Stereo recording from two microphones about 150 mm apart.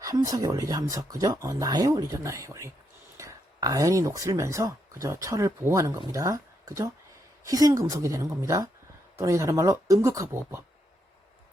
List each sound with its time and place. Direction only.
0.0 s speech: 25° right (ahead or behind)